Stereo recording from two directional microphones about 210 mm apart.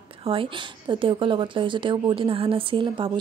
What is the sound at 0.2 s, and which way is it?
A woman's voice, 25° right (ahead or behind).